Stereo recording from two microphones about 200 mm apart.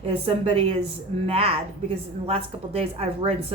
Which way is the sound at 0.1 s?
30° right (ahead or behind).